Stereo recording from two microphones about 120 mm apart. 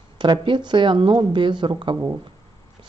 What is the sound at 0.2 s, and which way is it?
Speech, 40° right (ahead or behind).